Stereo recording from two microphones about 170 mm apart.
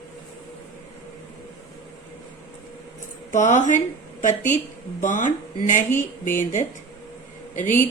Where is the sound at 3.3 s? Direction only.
45° left (ahead or behind).